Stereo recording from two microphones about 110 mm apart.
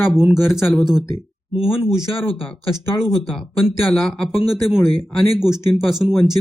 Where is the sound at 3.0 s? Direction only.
Centre (ahead or behind).